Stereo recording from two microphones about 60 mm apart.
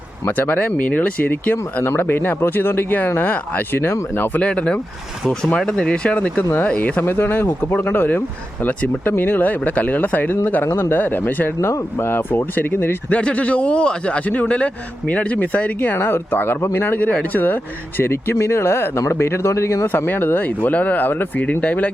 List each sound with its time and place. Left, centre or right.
0.3 s a man's voice: left
1.8 s speech: left
4.3 s a man's voice: centre
7.0 s a man's voice: left
11.6 s speech: left
13.1 s a man's voice: left
15.9 s speech: left
17.0 s speech: left
20.0 s a man's voice: left